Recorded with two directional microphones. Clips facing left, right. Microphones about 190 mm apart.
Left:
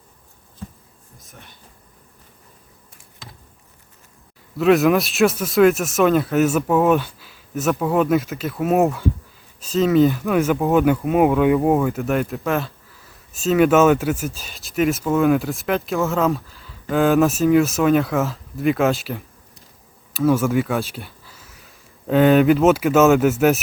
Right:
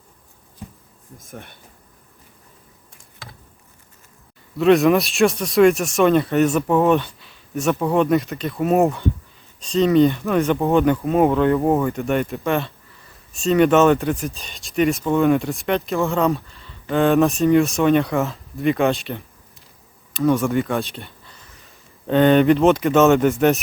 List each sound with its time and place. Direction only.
0.6 s a sound: 15° right (ahead or behind)
1.2 s speech: 55° right (ahead or behind)
4.5 s speech: centre (ahead or behind)